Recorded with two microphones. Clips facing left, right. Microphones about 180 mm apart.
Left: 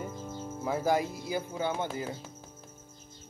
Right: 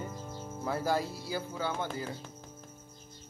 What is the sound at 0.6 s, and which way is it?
Speech, 15° left (ahead or behind).